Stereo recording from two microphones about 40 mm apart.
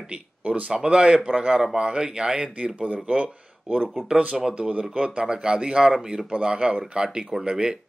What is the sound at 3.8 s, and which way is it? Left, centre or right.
Speech, left.